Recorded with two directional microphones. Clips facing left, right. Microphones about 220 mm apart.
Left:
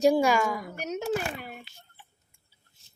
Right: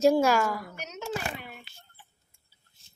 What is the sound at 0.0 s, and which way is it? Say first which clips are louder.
Speech: even; centre (ahead or behind).